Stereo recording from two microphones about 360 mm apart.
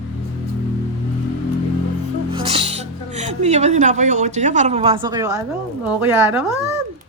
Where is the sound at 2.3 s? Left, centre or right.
Centre.